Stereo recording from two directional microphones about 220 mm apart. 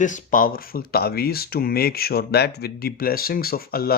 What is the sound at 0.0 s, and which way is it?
Speech, 35° left (ahead or behind).